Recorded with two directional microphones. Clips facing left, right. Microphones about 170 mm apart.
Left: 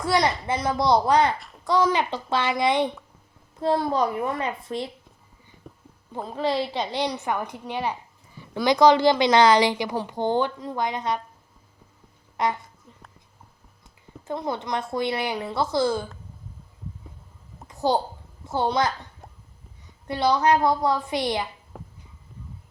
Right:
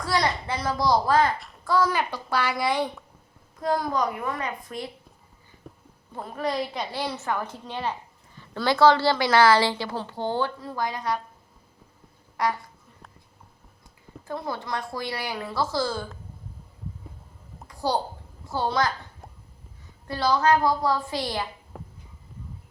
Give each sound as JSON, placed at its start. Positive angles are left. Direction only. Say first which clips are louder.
{"t": 0.0, "sound": "a woman's voice", "louder": "left 3 dB", "side_deg": 20}
{"t": 6.2, "sound": "a woman's voice", "louder": "left 3 dB", "side_deg": 25}
{"t": 12.4, "sound": "a woman's voice", "louder": "left 1 dB", "side_deg": 20}
{"t": 14.3, "sound": "a woman's voice", "louder": "left 3 dB", "side_deg": 20}
{"t": 17.7, "sound": "a sound", "louder": "left 3 dB", "side_deg": 20}
{"t": 18.4, "sound": "a woman's voice", "louder": "left 2 dB", "side_deg": 20}
{"t": 20.1, "sound": "a woman's voice", "louder": "left 1 dB", "side_deg": 20}
{"t": 21.7, "sound": "a sound", "louder": "even", "side_deg": 0}